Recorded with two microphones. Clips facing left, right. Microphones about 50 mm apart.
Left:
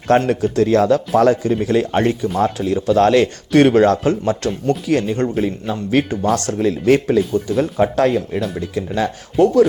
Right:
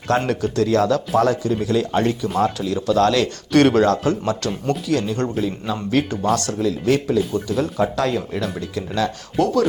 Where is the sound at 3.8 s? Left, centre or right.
Left.